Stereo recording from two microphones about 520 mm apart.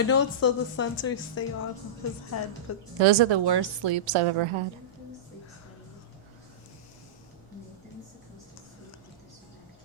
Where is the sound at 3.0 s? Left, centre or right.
Right.